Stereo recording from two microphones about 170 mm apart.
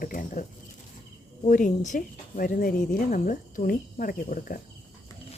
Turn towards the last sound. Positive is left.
turn(degrees=55)  # may be behind; listen again after turning